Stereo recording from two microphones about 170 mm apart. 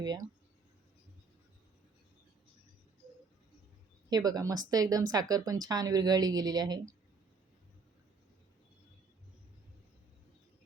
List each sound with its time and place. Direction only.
0.0 s speech: 25° right (ahead or behind)
4.1 s speech: 20° right (ahead or behind)